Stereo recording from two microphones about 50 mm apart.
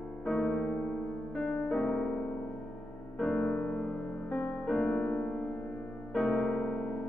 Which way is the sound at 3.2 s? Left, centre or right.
Centre.